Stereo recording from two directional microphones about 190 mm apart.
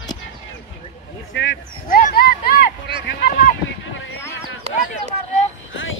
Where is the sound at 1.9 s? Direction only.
50° left (ahead or behind).